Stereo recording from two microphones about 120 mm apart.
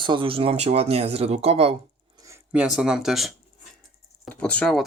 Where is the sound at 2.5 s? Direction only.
10° right (ahead or behind).